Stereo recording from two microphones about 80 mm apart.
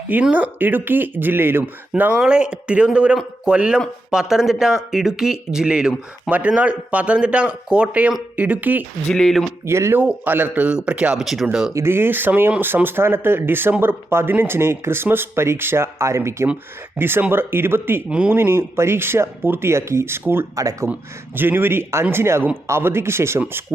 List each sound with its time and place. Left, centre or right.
0.1 s speech: centre
2.1 s speech: centre
9.0 s speech: centre
9.6 s speech: right
10.0 s speech: centre
11.7 s speech: right
18.1 s speech: centre
18.3 s speech: right
20.6 s speech: right
21.3 s speech: right